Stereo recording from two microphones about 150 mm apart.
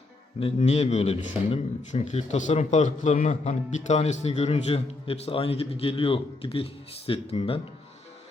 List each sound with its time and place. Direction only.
0.3 s speech: 45° left (ahead or behind)